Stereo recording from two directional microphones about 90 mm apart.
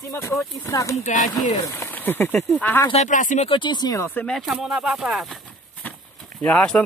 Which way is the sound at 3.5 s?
60° left (ahead or behind).